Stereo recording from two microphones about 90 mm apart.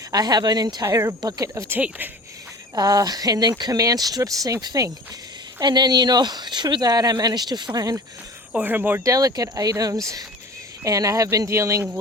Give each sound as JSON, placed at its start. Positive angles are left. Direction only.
{"t": 0.1, "sound": "speech", "side_deg": -50}
{"t": 0.9, "sound": "speech", "side_deg": -35}
{"t": 2.7, "sound": "speech", "side_deg": -45}
{"t": 8.5, "sound": "speech", "side_deg": -20}
{"t": 9.0, "sound": "speech", "side_deg": -40}